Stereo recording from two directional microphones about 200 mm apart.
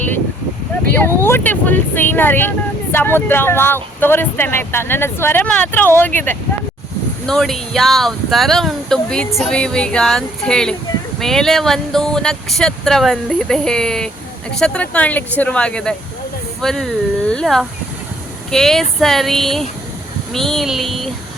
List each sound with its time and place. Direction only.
1.2 s speech: 10° left (ahead or behind)